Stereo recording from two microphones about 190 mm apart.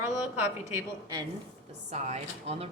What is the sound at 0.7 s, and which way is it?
Speech, 15° right (ahead or behind).